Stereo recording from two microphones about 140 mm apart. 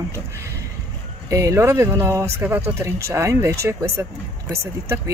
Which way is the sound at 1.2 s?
25° right (ahead or behind).